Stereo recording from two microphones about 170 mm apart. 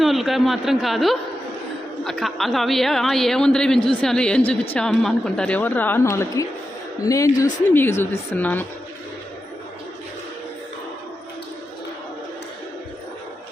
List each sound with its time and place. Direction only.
0.0 s a woman's voice: centre (ahead or behind)